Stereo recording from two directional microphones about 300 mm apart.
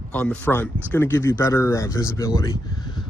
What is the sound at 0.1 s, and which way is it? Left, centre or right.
Speech, centre.